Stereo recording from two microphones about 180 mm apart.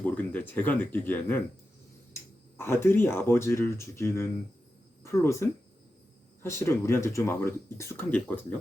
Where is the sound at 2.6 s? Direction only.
15° left (ahead or behind).